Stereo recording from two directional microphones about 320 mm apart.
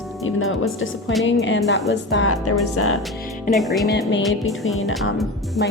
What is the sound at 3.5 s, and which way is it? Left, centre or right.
Music, centre.